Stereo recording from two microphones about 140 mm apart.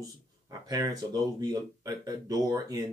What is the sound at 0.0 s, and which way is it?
Speech, 25° right (ahead or behind).